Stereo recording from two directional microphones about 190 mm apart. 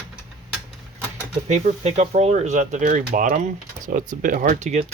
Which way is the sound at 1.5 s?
40° right (ahead or behind).